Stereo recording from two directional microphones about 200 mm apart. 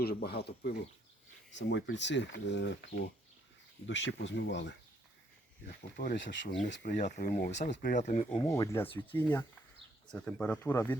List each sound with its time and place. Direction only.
0.0 s speech: 50° left (ahead or behind)
6.1 s speech: 65° left (ahead or behind)
6.8 s speech: 40° left (ahead or behind)
8.4 s speech: 15° left (ahead or behind)